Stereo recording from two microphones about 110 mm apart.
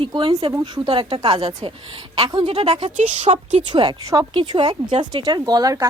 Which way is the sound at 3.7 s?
45° right (ahead or behind).